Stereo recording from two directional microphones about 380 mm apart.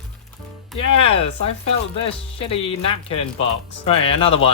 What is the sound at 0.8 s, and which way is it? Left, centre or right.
Speech, centre.